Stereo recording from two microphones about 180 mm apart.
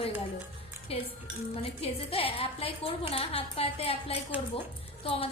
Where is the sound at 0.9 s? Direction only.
35° left (ahead or behind).